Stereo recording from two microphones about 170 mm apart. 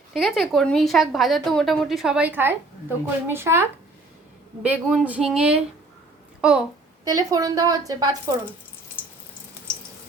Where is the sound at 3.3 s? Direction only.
15° right (ahead or behind).